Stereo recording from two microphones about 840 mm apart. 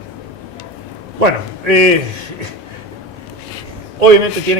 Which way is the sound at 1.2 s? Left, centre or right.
Right.